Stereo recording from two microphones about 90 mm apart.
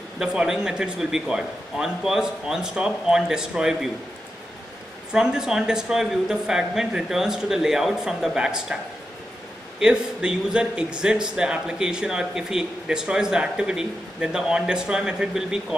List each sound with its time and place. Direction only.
0.2 s a man's voice: 10° right (ahead or behind)
5.1 s a woman's voice: 5° right (ahead or behind)
9.8 s a man's voice: 10° right (ahead or behind)